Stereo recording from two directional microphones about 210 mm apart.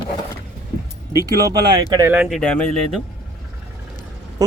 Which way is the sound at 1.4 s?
20° right (ahead or behind).